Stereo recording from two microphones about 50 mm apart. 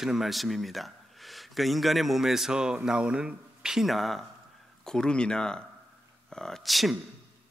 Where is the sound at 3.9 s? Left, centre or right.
Centre.